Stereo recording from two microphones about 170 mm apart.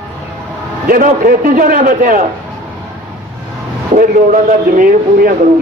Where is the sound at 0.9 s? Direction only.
50° right (ahead or behind).